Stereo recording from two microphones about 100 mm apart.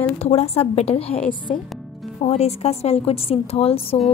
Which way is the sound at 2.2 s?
90° left.